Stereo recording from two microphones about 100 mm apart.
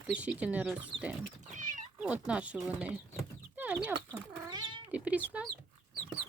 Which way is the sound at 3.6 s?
15° right (ahead or behind).